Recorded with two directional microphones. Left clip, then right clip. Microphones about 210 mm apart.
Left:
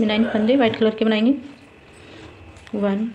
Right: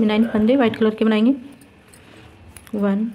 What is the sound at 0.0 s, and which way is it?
Speech, 35° right (ahead or behind).